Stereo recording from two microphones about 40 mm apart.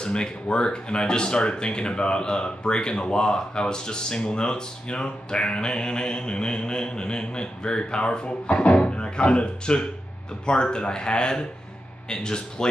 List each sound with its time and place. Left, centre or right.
0.0 s speech: left